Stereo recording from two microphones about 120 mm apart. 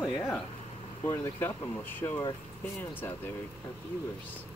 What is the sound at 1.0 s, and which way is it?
Speech, 25° left (ahead or behind).